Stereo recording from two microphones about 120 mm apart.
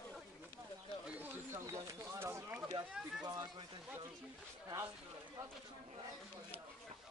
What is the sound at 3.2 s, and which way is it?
Speech, 35° right (ahead or behind).